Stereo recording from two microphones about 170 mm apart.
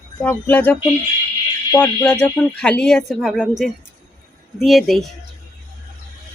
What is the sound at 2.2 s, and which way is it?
Speech, 5° left (ahead or behind).